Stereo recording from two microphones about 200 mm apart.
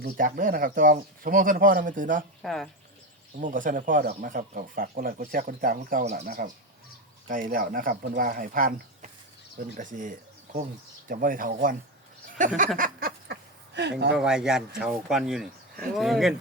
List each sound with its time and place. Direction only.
0.0 s speech: 45° right (ahead or behind)
2.4 s speech: centre (ahead or behind)
3.4 s speech: 40° right (ahead or behind)
12.5 s a sound: 45° right (ahead or behind)
14.1 s speech: 5° right (ahead or behind)